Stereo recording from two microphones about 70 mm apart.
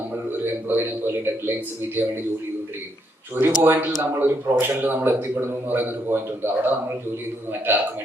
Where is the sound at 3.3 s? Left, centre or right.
Right.